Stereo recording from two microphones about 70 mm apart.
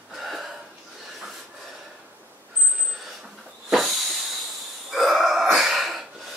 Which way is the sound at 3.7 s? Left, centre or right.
Centre.